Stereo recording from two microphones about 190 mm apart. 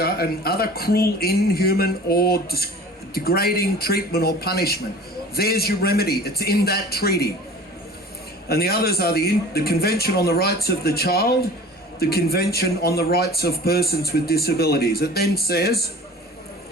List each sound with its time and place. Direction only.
0.0 s a man's voice: 55° left (ahead or behind)
8.4 s a man's voice: 55° left (ahead or behind)